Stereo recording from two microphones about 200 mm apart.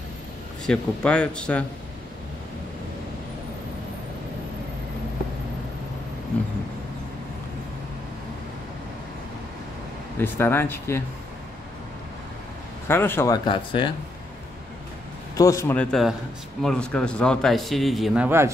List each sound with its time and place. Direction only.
0.7 s speech: 5° left (ahead or behind)
10.1 s speech: 10° left (ahead or behind)
12.8 s speech: 10° left (ahead or behind)
13.5 s speech: 25° left (ahead or behind)
15.3 s speech: 15° left (ahead or behind); by 18.5 s 10° right (ahead or behind)